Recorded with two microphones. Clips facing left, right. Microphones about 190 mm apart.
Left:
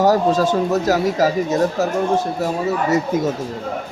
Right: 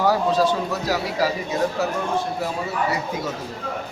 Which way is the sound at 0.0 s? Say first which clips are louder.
Left 4 dB; 45° left (ahead or behind).